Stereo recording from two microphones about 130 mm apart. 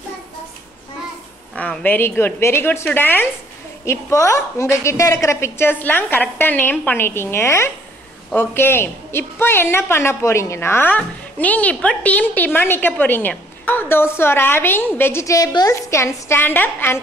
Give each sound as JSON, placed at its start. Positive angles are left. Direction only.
{"t": 1.6, "sound": "a woman's voice", "side_deg": 10}